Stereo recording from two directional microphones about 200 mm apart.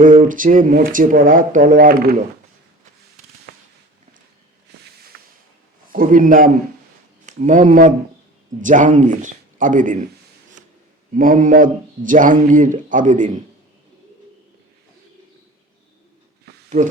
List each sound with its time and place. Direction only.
0.0 s speech: 40° right (ahead or behind)
3.5 s a sound: 55° right (ahead or behind)
5.1 s a sound: 50° right (ahead or behind)
5.9 s a man's voice: 45° right (ahead or behind)
11.1 s a man's voice: 40° right (ahead or behind)
16.6 s speech: 35° right (ahead or behind)